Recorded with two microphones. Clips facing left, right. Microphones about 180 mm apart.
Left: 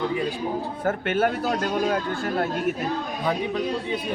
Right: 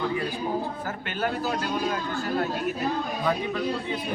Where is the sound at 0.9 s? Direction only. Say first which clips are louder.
Left 7 dB; 55° left (ahead or behind).